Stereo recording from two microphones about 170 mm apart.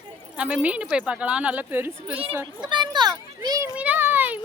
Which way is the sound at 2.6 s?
25° right (ahead or behind).